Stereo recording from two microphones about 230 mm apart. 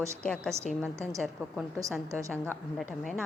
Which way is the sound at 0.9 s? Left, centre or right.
Centre.